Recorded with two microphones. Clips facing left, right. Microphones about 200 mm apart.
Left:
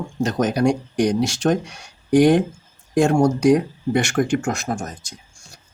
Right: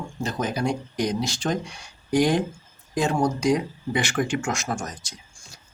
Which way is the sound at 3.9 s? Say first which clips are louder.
Left 6 dB; 45° left (ahead or behind).